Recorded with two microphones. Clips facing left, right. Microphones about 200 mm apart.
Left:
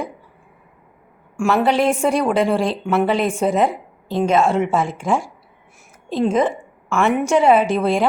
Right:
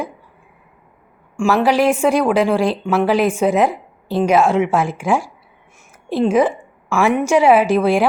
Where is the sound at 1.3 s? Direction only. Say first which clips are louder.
Right 2 dB; centre (ahead or behind).